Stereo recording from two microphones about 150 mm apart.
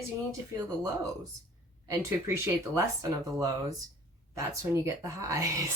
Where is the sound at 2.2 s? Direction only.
15° right (ahead or behind).